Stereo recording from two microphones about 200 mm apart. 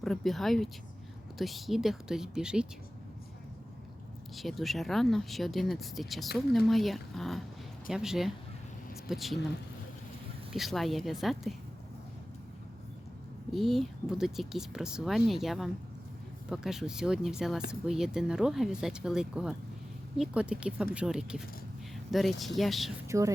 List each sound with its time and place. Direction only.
0.0 s speech: centre (ahead or behind)
4.4 s speech: centre (ahead or behind)
10.5 s speech: centre (ahead or behind)
13.5 s speech: centre (ahead or behind)
23.0 s speech: 15° right (ahead or behind)